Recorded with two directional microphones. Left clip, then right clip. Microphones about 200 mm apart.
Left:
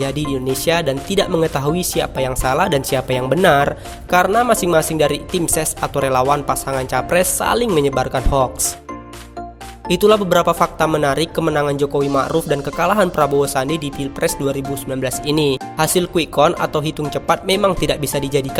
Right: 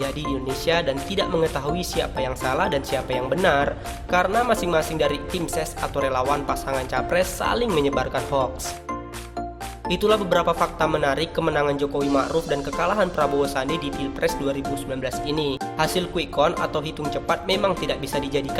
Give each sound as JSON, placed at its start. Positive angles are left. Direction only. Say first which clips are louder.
{"t": 0.0, "sound": "speech", "louder": "left 6 dB", "side_deg": 45}
{"t": 9.9, "sound": "speech", "louder": "left 7 dB", "side_deg": 45}